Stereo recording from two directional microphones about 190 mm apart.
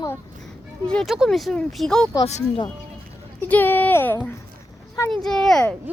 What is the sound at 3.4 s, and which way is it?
A child's voice, 10° left (ahead or behind).